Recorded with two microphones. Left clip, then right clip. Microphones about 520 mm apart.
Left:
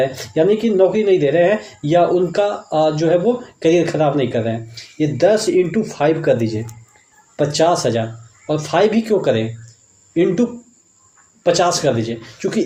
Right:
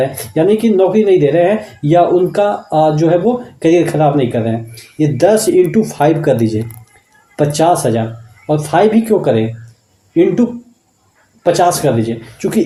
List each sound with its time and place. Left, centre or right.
0.0 s speech: right